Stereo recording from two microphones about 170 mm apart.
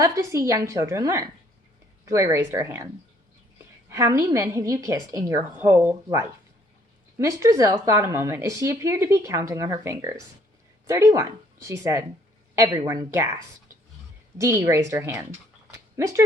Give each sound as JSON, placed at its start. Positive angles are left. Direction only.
{"t": 0.0, "sound": "a woman's voice", "side_deg": -20}
{"t": 3.8, "sound": "speech", "side_deg": -15}
{"t": 14.3, "sound": "speech", "side_deg": -20}